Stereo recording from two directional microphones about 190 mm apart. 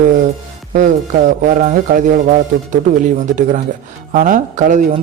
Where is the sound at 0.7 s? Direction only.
40° right (ahead or behind).